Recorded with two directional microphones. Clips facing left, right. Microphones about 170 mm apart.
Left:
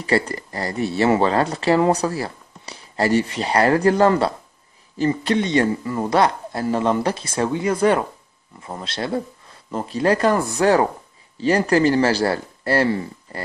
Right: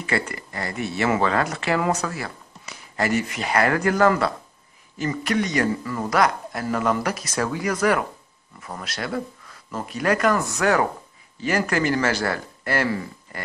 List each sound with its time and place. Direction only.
0.0 s speech: 35° left (ahead or behind)